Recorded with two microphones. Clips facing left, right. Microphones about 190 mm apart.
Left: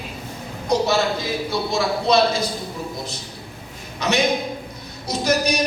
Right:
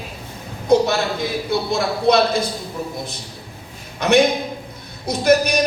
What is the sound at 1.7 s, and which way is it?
Speech, 55° right (ahead or behind).